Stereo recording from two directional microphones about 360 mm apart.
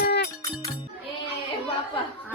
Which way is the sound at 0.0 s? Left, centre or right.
Left.